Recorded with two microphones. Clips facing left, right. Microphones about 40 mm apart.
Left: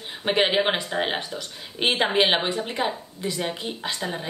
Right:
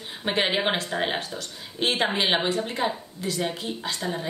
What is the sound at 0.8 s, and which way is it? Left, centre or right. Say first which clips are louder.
Speech: left 1 dB; centre.